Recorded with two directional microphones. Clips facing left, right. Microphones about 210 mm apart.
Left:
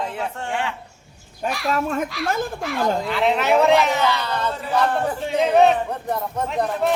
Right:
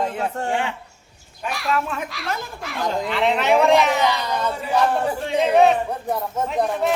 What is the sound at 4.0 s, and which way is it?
Speech, 15° right (ahead or behind).